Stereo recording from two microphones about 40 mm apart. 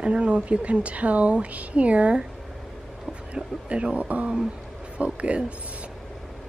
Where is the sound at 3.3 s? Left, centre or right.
Right.